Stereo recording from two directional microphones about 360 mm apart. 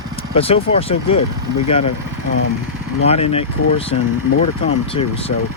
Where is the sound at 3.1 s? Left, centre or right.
Centre.